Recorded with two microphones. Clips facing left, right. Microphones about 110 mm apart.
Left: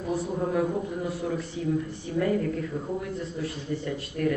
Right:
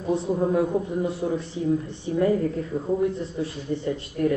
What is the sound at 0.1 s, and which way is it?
Speech, 25° right (ahead or behind).